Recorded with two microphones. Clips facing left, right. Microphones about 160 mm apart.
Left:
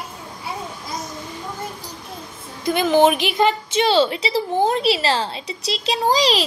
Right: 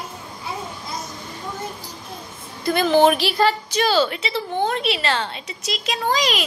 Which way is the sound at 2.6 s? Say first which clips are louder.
Even; 15° left (ahead or behind).